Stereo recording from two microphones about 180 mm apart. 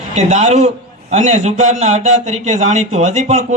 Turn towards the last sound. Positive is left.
turn(degrees=-40)  # may be behind; listen again after turning